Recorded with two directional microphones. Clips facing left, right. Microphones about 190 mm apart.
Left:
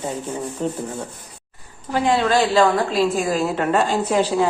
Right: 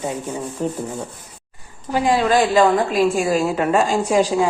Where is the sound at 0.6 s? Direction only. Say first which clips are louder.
Right 1 dB; 5° right (ahead or behind).